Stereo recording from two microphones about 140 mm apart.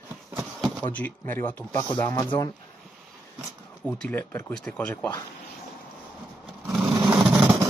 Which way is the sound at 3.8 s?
10° left (ahead or behind).